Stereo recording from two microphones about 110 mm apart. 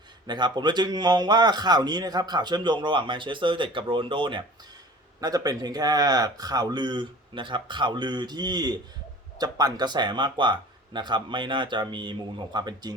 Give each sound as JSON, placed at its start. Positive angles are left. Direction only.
{"t": 0.3, "sound": "a man's voice", "side_deg": -40}
{"t": 5.2, "sound": "a man's voice", "side_deg": -35}